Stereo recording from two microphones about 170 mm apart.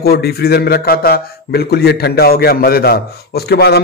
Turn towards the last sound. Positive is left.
turn(degrees=75)  # may be behind; listen again after turning